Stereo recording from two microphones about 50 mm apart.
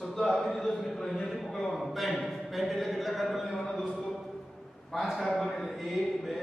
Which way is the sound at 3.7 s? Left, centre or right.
Centre.